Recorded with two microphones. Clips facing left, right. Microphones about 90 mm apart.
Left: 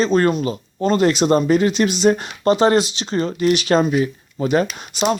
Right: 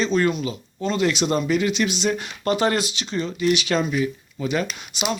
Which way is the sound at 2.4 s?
30° left (ahead or behind).